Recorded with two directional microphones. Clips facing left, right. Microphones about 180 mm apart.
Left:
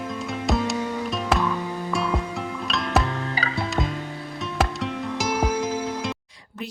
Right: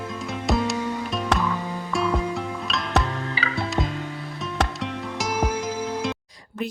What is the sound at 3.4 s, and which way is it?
Music, 40° left (ahead or behind).